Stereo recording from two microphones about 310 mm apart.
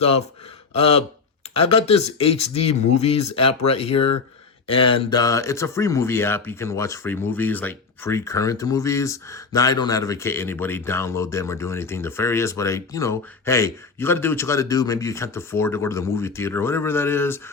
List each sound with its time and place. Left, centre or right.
0.8 s speech: centre